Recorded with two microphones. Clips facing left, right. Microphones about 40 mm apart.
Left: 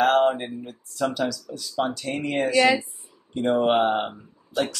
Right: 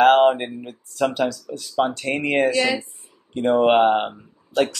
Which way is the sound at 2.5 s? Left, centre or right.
Centre.